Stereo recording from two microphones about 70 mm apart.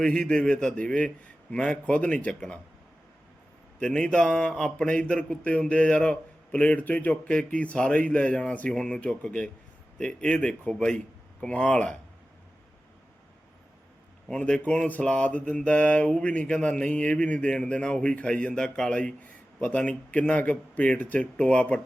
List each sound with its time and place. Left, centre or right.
0.0 s speech: centre
3.8 s speech: centre
14.3 s speech: centre